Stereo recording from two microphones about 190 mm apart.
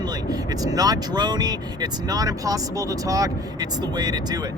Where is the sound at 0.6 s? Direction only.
20° right (ahead or behind).